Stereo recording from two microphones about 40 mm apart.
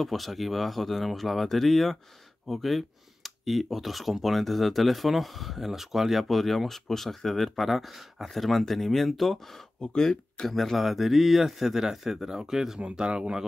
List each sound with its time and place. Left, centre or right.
0.0 s speech: centre
9.8 s speech: centre
10.5 s speech: centre